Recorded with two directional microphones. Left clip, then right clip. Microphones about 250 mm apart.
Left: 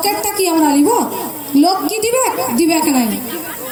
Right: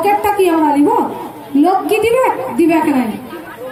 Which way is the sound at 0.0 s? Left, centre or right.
Left.